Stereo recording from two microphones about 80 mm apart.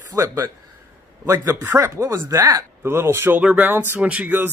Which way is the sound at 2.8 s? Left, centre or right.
Right.